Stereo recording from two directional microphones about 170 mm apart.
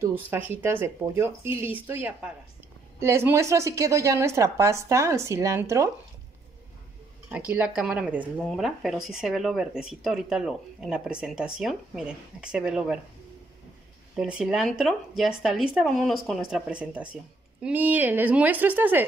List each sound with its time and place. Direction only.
0.3 s a woman's voice: 10° right (ahead or behind)
7.2 s a woman's voice: 10° right (ahead or behind)
14.1 s speech: 5° right (ahead or behind)